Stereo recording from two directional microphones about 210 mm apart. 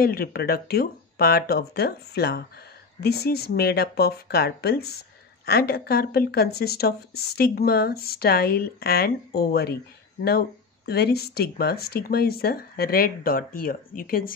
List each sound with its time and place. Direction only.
0.0 s speech: 45° left (ahead or behind)
10.9 s speech: 50° left (ahead or behind)